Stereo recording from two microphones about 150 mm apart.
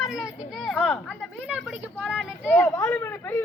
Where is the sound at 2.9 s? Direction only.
15° left (ahead or behind).